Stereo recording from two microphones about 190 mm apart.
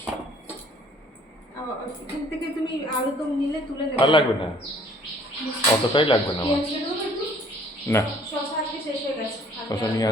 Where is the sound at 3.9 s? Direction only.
25° left (ahead or behind).